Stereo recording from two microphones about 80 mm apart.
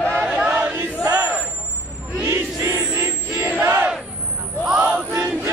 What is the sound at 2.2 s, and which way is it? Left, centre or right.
Battle cry, right.